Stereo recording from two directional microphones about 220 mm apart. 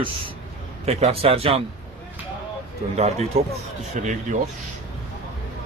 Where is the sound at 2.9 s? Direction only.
30° right (ahead or behind).